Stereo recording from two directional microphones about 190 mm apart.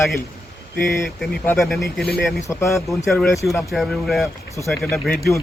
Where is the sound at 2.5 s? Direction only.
15° left (ahead or behind).